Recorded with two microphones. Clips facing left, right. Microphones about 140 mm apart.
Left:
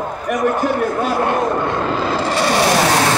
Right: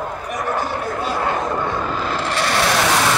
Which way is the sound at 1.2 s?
60° left (ahead or behind).